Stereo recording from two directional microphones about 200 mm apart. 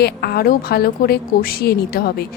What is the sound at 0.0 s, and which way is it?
A woman's voice, 50° left (ahead or behind).